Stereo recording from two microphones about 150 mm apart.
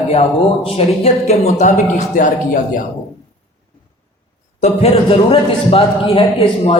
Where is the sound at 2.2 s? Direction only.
60° left (ahead or behind).